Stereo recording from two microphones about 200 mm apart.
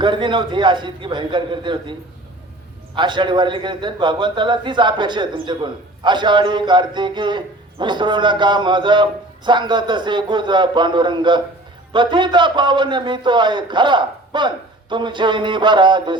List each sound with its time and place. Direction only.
0.0 s a man's voice: 25° right (ahead or behind)